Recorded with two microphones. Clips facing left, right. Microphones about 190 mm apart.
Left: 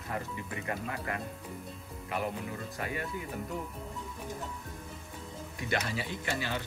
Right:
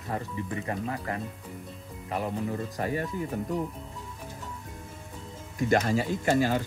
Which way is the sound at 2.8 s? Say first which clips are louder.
Right 6 dB; 40° right (ahead or behind).